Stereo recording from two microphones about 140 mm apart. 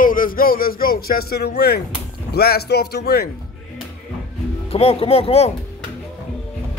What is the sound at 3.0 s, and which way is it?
Speech, 90° left.